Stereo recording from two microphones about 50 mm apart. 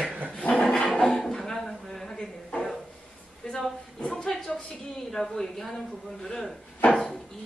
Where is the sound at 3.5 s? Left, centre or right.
Centre.